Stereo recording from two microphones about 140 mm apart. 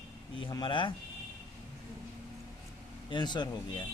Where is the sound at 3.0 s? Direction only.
35° left (ahead or behind).